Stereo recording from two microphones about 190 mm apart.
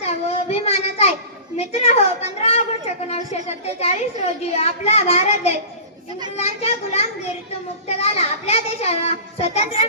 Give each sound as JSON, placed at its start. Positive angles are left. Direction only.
{"t": 0.0, "sound": "child singing", "side_deg": 35}
{"t": 1.5, "sound": "a woman's voice", "side_deg": 35}
{"t": 7.9, "sound": "a sound", "side_deg": 35}